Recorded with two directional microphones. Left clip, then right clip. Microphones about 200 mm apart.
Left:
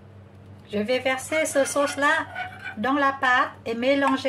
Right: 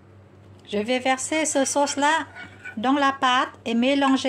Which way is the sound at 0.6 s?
40° right (ahead or behind).